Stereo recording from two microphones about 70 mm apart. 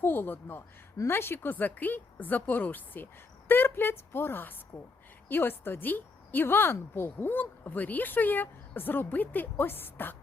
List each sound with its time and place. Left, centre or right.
0.0 s a woman's voice: left